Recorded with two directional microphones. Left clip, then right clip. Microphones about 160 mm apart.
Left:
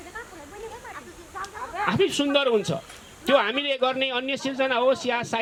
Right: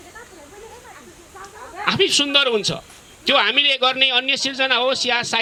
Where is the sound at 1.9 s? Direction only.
30° right (ahead or behind).